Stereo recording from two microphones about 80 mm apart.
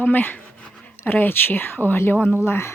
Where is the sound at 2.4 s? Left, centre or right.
Left.